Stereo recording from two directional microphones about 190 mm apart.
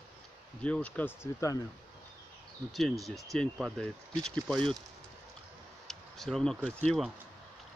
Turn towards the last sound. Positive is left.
turn(degrees=5)  # may be behind; listen again after turning